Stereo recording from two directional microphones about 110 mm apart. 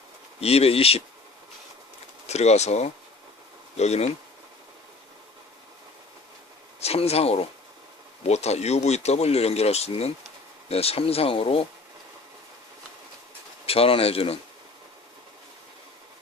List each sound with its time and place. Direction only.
0.3 s speech: 65° left (ahead or behind)
2.2 s speech: 85° left
6.7 s speech: 70° left (ahead or behind)
8.3 s speech: 80° left; by 11.6 s 60° left (ahead or behind)
13.7 s speech: 60° left (ahead or behind)